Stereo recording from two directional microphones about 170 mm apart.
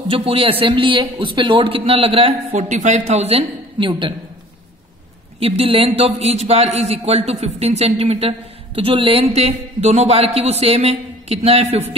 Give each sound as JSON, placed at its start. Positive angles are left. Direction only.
{"t": 0.1, "sound": "a man's voice", "side_deg": -35}
{"t": 5.4, "sound": "a man's voice", "side_deg": -35}